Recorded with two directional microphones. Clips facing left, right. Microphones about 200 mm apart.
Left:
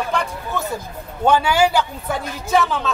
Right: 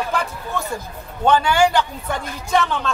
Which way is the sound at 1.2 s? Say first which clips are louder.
Even; 10° left (ahead or behind).